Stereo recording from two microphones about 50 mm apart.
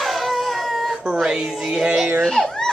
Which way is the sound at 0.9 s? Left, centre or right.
Centre.